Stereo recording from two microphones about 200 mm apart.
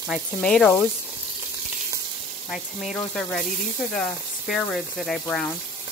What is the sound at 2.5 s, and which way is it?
Speech, centre (ahead or behind).